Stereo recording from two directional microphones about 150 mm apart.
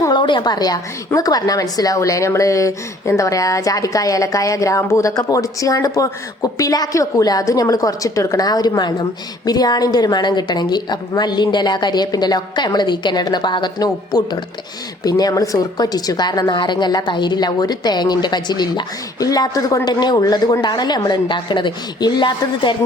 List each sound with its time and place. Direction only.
0.0 s a woman's voice: 30° left (ahead or behind)